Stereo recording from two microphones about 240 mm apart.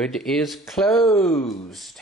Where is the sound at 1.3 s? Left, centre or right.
Centre.